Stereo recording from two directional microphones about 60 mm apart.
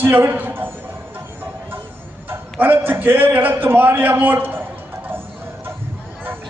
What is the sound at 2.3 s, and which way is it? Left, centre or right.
A man's voice, right.